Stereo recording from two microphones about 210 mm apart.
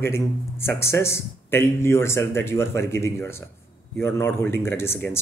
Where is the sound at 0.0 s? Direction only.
10° left (ahead or behind).